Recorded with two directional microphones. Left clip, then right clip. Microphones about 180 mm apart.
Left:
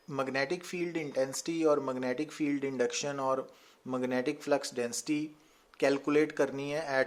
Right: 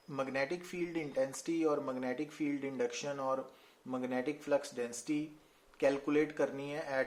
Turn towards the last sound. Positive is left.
turn(degrees=45)  # may be behind; listen again after turning